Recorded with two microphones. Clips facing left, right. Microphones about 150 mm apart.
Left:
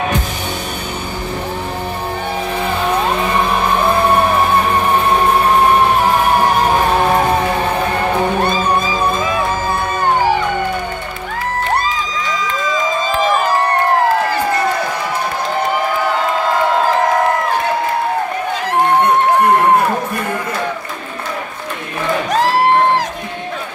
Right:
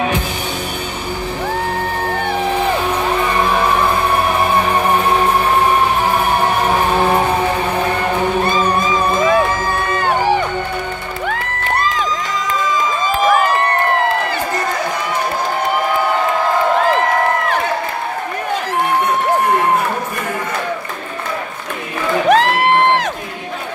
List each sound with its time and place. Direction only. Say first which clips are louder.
22.3 s music: even; 65° right (ahead or behind)